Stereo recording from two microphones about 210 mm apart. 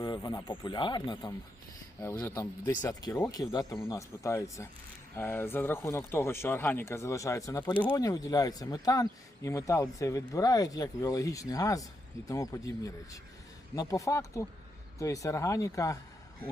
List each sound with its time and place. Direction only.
0.0 s speech: 20° left (ahead or behind)